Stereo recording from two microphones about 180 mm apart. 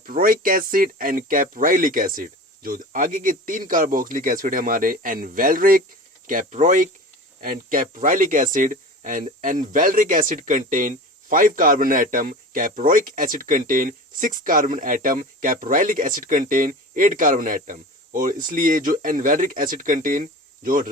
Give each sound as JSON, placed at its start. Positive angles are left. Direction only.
{"t": 0.0, "sound": "speech", "side_deg": -50}